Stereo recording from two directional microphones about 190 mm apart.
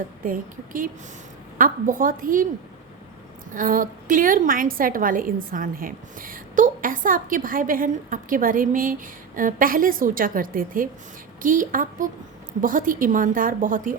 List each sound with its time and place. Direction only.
0.3 s a woman's voice: 45° right (ahead or behind)
3.5 s a woman's voice: 45° right (ahead or behind)